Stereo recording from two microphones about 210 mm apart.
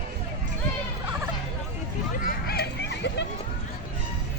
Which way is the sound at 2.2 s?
50° left (ahead or behind).